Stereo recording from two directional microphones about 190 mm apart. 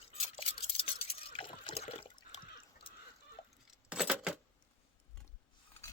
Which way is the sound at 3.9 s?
5° right (ahead or behind).